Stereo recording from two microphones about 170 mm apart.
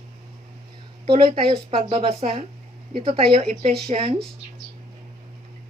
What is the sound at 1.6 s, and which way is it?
Speech, 35° right (ahead or behind).